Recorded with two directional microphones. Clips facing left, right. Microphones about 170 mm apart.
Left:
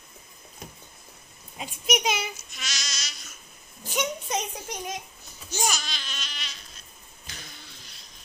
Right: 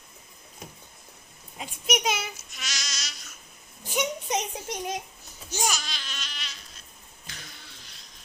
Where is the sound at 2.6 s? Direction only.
10° right (ahead or behind).